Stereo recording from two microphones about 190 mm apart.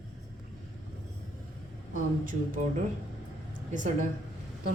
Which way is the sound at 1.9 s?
45° right (ahead or behind).